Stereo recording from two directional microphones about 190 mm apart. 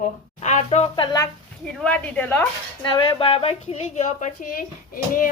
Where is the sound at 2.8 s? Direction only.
25° left (ahead or behind).